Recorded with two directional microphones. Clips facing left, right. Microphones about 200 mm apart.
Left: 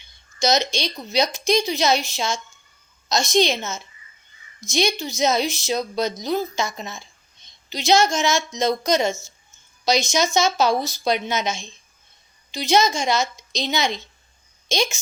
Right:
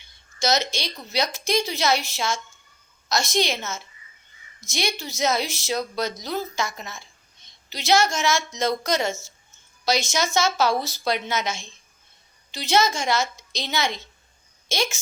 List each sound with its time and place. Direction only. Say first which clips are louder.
0.0 s a woman's voice: left 3 dB; 15° left (ahead or behind)